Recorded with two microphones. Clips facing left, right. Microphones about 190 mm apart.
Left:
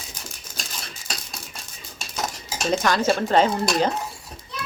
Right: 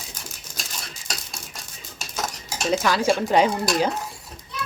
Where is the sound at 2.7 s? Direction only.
5° right (ahead or behind).